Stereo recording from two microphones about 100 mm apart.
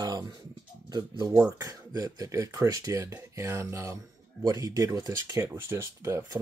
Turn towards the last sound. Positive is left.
turn(degrees=-25)  # may be behind; listen again after turning